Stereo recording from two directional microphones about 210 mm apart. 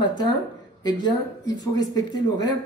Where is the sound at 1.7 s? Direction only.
20° left (ahead or behind).